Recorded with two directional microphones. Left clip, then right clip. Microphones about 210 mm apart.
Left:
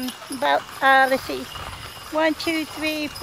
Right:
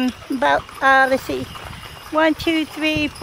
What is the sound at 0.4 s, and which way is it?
Speech, 25° right (ahead or behind).